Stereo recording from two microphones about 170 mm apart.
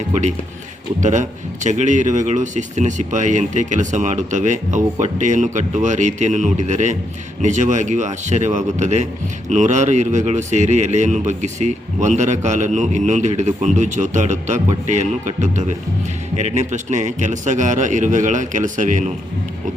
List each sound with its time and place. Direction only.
0.1 s a man's voice: 45° right (ahead or behind)